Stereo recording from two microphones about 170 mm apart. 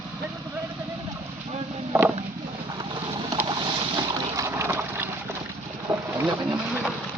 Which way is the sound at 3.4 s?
25° right (ahead or behind).